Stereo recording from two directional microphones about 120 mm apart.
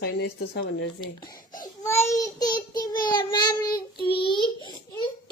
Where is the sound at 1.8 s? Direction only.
20° left (ahead or behind).